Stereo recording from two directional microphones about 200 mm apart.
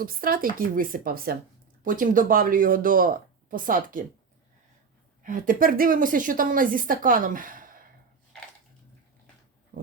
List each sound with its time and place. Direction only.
0.0 s speech: 45° right (ahead or behind)
5.2 s speech: 45° right (ahead or behind)